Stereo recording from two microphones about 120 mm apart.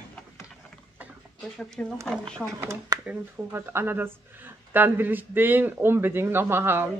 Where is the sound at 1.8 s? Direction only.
10° left (ahead or behind).